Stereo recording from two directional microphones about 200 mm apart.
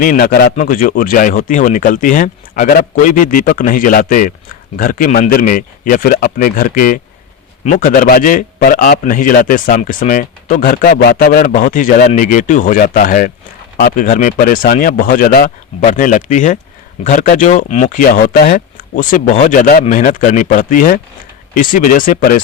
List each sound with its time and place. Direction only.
0.0 s a man's voice: 45° left (ahead or behind)